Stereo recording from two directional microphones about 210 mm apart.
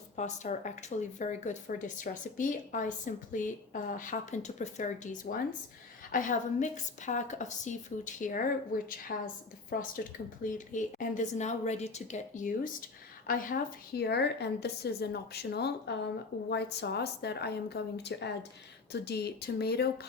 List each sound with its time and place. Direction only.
0.2 s speech: 35° left (ahead or behind)
5.3 s a woman's voice: 50° left (ahead or behind)
6.1 s a woman's voice: 40° left (ahead or behind)